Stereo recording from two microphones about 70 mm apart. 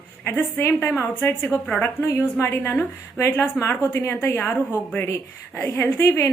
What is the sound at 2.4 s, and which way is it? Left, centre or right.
A woman's voice, left.